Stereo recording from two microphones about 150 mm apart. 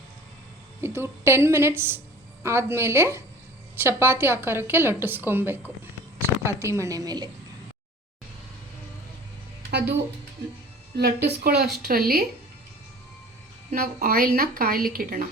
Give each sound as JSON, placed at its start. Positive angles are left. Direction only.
{"t": 0.8, "sound": "a woman's voice", "side_deg": -15}
{"t": 10.9, "sound": "a woman's voice", "side_deg": -90}
{"t": 13.7, "sound": "speech", "side_deg": -75}